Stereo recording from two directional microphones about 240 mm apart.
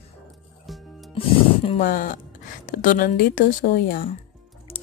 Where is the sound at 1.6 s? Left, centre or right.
Left.